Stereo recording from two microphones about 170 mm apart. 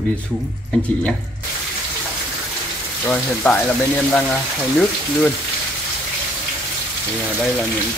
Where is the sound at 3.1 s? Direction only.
10° left (ahead or behind).